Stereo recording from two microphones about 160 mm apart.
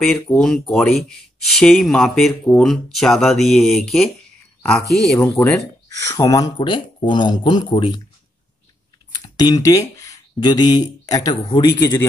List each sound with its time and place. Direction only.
0.0 s speech: centre (ahead or behind)
5.2 s speech: 15° left (ahead or behind)
9.2 s speech: 25° left (ahead or behind)